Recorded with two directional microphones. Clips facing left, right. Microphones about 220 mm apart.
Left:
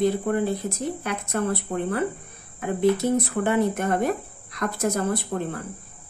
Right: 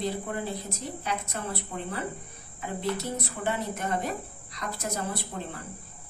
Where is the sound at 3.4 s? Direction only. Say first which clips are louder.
Left 9 dB; 55° left (ahead or behind).